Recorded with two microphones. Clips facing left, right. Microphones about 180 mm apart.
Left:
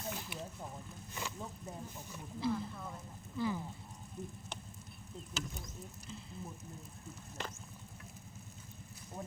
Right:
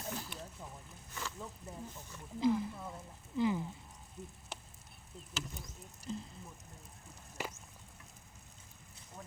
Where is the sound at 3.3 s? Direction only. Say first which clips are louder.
Right 4 dB; 15° right (ahead or behind).